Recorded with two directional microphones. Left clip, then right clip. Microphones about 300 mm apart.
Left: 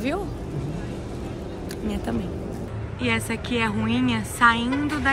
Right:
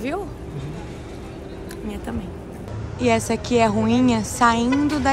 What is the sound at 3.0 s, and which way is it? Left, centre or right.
A woman's voice, centre.